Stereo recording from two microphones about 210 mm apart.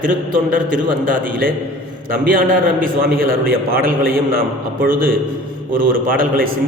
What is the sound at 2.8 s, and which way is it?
A man's voice, 45° right (ahead or behind).